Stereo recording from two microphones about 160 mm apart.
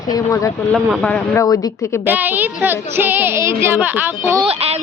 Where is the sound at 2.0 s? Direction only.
10° right (ahead or behind).